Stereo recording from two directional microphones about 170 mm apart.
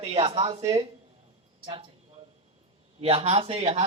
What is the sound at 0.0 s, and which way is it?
Speech, 35° right (ahead or behind).